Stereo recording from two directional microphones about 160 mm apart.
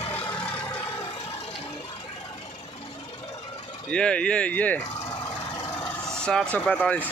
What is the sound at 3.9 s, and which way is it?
Speech, 5° left (ahead or behind).